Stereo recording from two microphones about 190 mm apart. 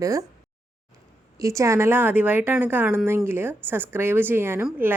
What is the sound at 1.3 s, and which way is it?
A woman's voice, 15° right (ahead or behind).